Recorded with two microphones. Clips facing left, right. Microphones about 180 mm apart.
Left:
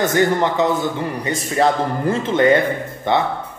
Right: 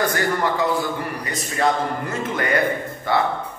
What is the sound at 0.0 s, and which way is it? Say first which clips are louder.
Speech: left 5 dB; 20° left (ahead or behind).